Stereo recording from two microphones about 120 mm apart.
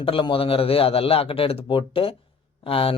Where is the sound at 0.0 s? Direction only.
45° left (ahead or behind).